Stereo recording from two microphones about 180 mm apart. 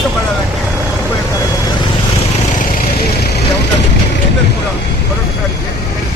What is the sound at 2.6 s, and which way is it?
Vehicle, 50° left (ahead or behind).